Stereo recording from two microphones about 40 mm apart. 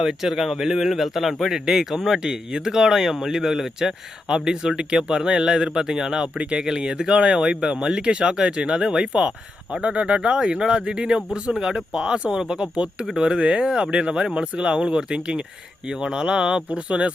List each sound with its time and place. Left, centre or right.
0.0 s speech: centre
7.1 s speech: right
8.1 s speech: right
11.4 s speech: centre